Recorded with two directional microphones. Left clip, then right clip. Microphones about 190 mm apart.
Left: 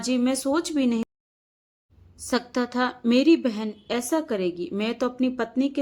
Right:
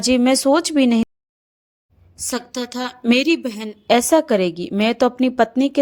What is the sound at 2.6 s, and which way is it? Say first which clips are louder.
A woman's voice: even; 40° right (ahead or behind).